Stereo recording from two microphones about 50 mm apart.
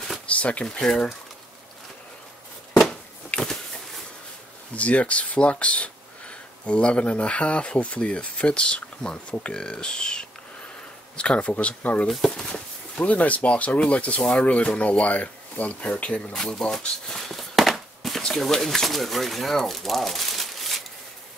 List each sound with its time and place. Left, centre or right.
0.3 s speech: left
0.7 s speech: centre
3.3 s a sound: left
4.7 s speech: left
12.1 s speech: centre
12.4 s speech: centre
16.3 s a sound: centre
18.2 s speech: centre